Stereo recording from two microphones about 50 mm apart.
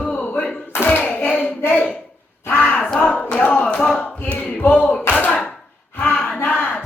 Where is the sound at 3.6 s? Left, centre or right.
Left.